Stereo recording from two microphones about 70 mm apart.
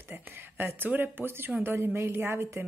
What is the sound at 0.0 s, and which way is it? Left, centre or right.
Speech, right.